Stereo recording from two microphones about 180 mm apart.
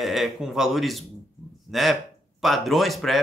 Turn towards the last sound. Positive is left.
turn(degrees=0)  # may be behind; listen again after turning